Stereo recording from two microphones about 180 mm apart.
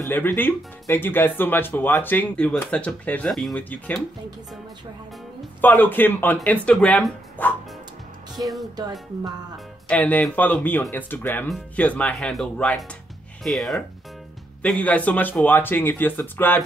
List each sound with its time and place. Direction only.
0.0 s speech: 10° left (ahead or behind)
5.6 s speech: 10° left (ahead or behind)
8.4 s speech: 25° right (ahead or behind)
9.8 s speech: 10° left (ahead or behind)